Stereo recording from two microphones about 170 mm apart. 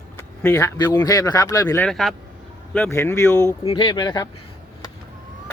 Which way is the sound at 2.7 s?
10° left (ahead or behind).